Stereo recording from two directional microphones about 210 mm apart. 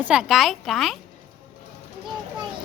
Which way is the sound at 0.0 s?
5° right (ahead or behind).